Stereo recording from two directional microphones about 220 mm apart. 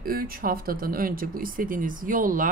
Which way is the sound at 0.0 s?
40° right (ahead or behind).